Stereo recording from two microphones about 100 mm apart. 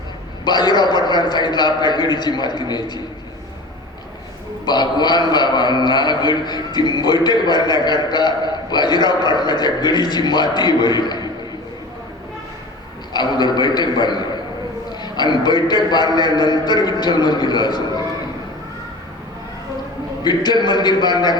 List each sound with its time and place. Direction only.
0.4 s a man's voice: 45° left (ahead or behind)
4.6 s a man's voice: 45° left (ahead or behind)
13.1 s a man's voice: 45° left (ahead or behind)
20.2 s a man's voice: 45° left (ahead or behind)